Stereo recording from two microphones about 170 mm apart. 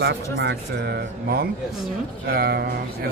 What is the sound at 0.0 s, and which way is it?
A man's voice, 85° right.